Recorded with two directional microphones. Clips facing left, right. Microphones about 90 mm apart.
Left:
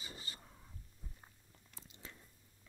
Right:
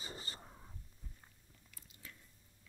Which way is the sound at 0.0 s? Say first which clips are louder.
Right 3 dB; 35° right (ahead or behind).